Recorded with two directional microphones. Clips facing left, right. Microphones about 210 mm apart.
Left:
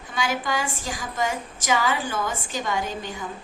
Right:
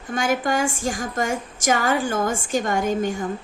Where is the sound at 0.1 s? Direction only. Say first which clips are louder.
Right 5 dB; 50° right (ahead or behind).